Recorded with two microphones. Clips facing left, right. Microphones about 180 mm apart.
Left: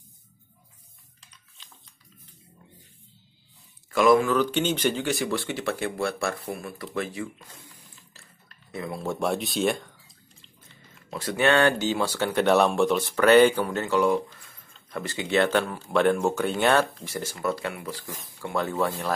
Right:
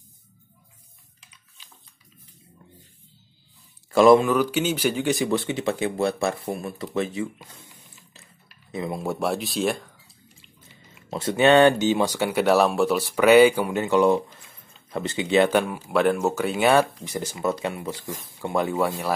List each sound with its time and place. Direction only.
1.6 s a sound: 5° right (ahead or behind)
3.9 s speech: 30° right (ahead or behind)
4.3 s speech: 10° right (ahead or behind)
7.7 s a sound: 20° right (ahead or behind)
8.7 s speech: 20° right (ahead or behind)
9.0 s speech: 5° right (ahead or behind)
11.1 s speech: 25° right (ahead or behind)